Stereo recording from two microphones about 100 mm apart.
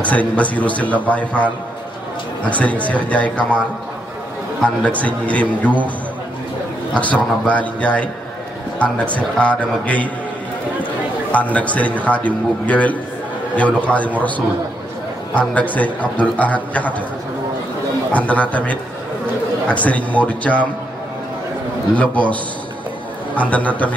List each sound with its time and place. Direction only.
0.0 s a man's voice: 15° left (ahead or behind)
7.4 s a man's voice: 15° left (ahead or behind)
11.3 s a man's voice: 15° left (ahead or behind)
18.1 s a man's voice: 15° left (ahead or behind)
21.9 s a man's voice: 15° left (ahead or behind)